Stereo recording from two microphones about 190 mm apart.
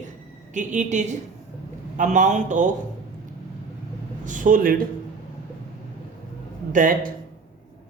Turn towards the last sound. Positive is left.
turn(degrees=-45)  # may be behind; listen again after turning